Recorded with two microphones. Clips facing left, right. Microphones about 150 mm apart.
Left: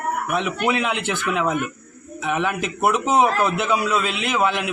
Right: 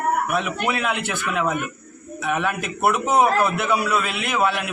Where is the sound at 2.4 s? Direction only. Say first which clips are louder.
Even; 20° left (ahead or behind).